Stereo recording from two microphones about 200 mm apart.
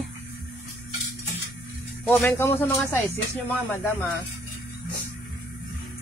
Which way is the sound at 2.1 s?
10° left (ahead or behind).